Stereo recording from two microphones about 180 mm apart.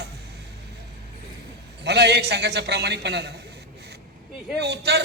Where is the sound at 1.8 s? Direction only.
70° right (ahead or behind).